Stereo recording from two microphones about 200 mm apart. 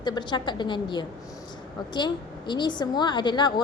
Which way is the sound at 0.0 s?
20° left (ahead or behind).